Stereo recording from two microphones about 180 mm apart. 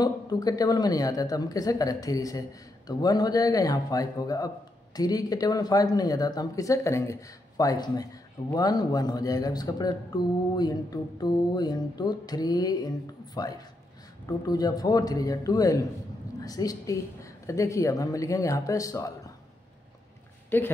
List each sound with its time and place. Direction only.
0.0 s a woman's voice: 20° left (ahead or behind)
20.4 s speech: 10° left (ahead or behind)